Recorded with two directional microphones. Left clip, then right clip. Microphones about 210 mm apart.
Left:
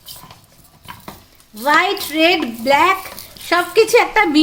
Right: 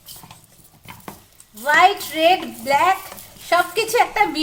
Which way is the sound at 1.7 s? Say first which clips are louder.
Right 1 dB; 50° left (ahead or behind).